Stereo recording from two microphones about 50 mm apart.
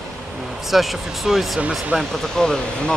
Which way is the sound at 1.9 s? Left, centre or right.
Right.